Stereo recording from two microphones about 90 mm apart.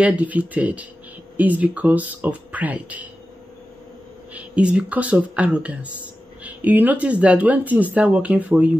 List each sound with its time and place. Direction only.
0.0 s speech: 15° right (ahead or behind)
4.3 s speech: 15° right (ahead or behind)